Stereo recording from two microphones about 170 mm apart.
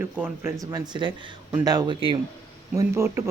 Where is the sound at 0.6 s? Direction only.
25° right (ahead or behind).